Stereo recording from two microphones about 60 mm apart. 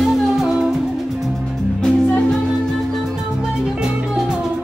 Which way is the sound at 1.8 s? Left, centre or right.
Centre.